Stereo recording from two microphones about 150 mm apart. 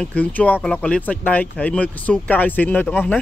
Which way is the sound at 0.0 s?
10° left (ahead or behind).